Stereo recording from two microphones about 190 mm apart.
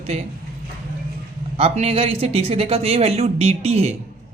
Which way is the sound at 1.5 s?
35° right (ahead or behind).